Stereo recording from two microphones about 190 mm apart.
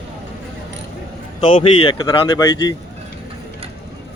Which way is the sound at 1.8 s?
25° left (ahead or behind).